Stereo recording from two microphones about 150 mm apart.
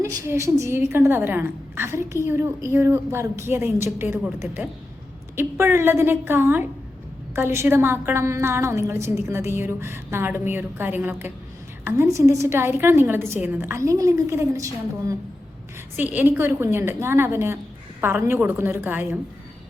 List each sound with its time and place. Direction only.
0.0 s a woman's voice: 20° right (ahead or behind)